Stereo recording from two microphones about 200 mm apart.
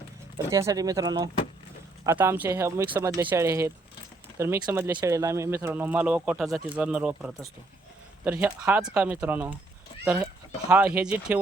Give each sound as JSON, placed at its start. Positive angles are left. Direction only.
{"t": 0.5, "sound": "speech", "side_deg": -15}